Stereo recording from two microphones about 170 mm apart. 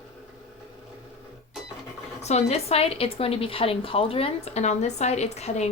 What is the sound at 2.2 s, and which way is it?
Speech, 40° left (ahead or behind).